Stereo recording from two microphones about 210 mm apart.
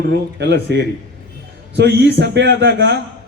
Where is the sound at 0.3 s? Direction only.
55° right (ahead or behind).